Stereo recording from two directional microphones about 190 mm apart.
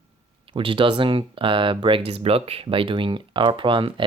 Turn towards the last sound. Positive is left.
turn(degrees=-25)  # may be behind; listen again after turning